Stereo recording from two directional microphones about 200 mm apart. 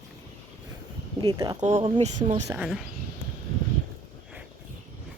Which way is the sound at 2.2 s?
35° right (ahead or behind).